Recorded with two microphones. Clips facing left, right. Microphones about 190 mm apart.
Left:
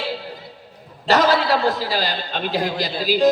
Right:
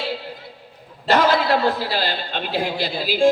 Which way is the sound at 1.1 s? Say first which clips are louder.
Even; 40° left (ahead or behind).